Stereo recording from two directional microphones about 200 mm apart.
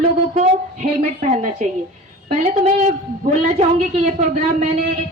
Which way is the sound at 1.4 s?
40° right (ahead or behind).